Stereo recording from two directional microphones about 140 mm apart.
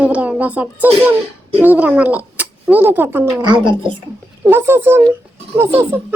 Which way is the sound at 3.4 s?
35° right (ahead or behind).